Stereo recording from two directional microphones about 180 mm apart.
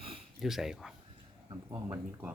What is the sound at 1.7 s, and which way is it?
Speech, 15° right (ahead or behind).